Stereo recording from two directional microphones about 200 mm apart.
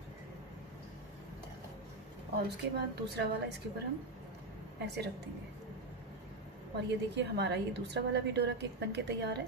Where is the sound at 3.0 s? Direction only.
55° right (ahead or behind).